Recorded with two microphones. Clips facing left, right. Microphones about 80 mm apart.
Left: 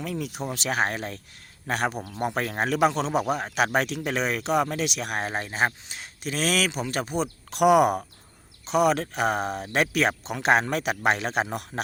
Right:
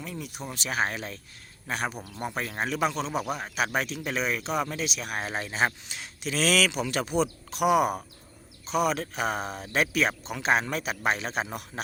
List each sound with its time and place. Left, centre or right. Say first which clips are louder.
0.0 s speech: left 6 dB; left
1.6 s speech: left 5 dB; left
5.2 s speech: left 1 dB; left
6.7 s speech: even; left
7.5 s speech: left 5 dB; left
11.7 s speech: left 5 dB; left